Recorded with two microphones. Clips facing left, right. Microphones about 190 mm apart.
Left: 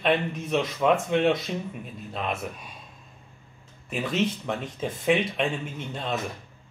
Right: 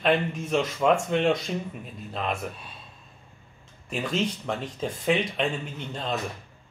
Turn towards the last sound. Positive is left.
turn(degrees=5)  # may be behind; listen again after turning